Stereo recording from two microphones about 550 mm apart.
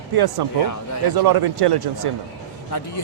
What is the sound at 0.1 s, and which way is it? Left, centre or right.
A man's voice, right.